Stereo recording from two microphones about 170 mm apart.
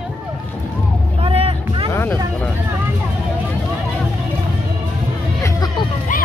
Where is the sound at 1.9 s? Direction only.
15° left (ahead or behind).